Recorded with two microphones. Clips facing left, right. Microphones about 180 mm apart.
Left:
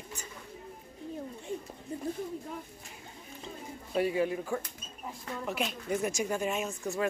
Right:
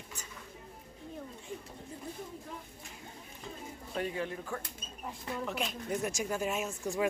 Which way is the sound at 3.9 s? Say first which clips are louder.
Left 7 dB; 10° left (ahead or behind).